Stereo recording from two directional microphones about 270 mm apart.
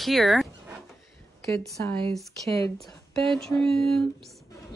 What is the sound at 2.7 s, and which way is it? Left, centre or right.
A woman's voice, centre.